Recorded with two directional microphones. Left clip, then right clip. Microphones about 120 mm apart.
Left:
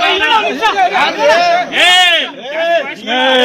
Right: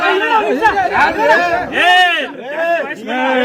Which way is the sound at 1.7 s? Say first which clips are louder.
Left 1 dB; 10° right (ahead or behind).